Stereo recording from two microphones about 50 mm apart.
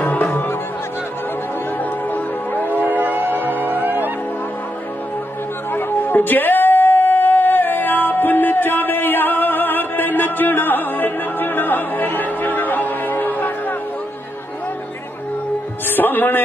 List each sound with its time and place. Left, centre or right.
0.1 s music: left
2.0 s music: left
2.8 s vehicle: right
3.5 s music: right
5.7 s music: left
16.0 s music: left